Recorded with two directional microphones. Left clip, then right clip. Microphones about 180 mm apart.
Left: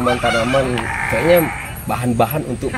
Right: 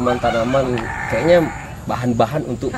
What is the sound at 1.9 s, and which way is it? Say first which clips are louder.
Speech: even; 5° left (ahead or behind).